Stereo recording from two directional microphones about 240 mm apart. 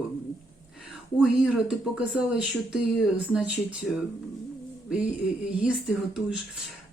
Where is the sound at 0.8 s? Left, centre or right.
Centre.